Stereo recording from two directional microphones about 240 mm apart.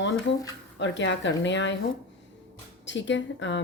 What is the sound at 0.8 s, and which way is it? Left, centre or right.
Speech, left.